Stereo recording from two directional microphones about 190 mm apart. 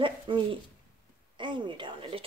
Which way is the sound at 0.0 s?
25° right (ahead or behind).